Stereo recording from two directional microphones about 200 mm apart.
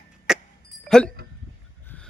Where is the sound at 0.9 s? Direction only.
5° left (ahead or behind).